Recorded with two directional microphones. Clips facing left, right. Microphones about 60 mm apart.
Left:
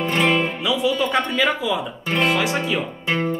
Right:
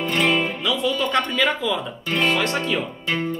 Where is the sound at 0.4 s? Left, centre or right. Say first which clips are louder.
Left 2 dB; centre.